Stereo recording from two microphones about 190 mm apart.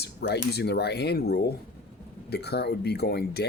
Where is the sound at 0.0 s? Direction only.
55° left (ahead or behind).